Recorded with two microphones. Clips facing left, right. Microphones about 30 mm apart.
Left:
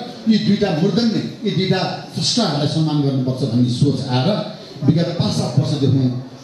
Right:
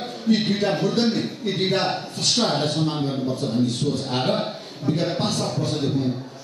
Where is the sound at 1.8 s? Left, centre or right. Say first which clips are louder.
Left 1 dB; centre.